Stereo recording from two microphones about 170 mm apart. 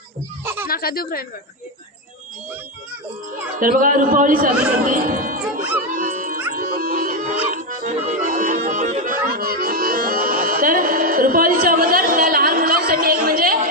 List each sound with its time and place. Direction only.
0.4 s a sound: 15° right (ahead or behind)
0.7 s speech: 60° left (ahead or behind)
3.6 s speech: 50° right (ahead or behind)
5.9 s music: 55° right (ahead or behind)